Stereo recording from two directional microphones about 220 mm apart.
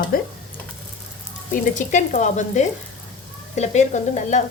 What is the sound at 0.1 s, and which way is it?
Speech, 40° left (ahead or behind).